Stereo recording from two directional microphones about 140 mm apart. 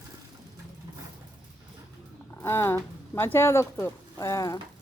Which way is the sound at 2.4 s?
15° left (ahead or behind).